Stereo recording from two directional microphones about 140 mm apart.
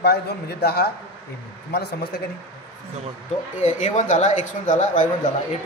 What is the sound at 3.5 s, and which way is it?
A man's voice, 60° left (ahead or behind).